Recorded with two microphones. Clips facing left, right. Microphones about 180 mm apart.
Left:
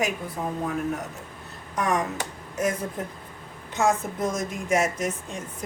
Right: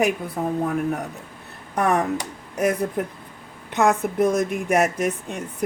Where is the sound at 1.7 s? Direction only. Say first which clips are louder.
Right 5 dB; 60° right (ahead or behind).